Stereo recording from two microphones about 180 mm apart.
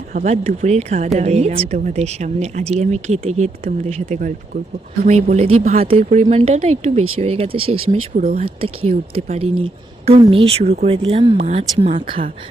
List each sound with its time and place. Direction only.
0.1 s speech: 45° right (ahead or behind); by 7.8 s 30° right (ahead or behind)
8.1 s speech: 55° right (ahead or behind)
8.4 s speech: 35° right (ahead or behind)